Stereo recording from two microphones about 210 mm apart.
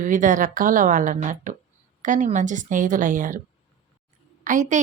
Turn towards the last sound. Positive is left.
turn(degrees=-35)  # may be behind; listen again after turning